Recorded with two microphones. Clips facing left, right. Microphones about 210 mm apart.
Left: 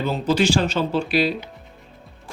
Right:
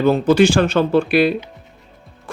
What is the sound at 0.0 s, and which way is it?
Speech, 55° right (ahead or behind).